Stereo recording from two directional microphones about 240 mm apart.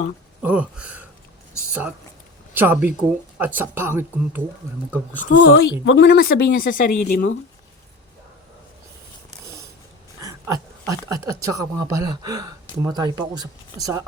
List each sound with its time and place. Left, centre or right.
0.4 s speech: centre
2.6 s speech: centre
5.4 s speech: left
10.2 s speech: centre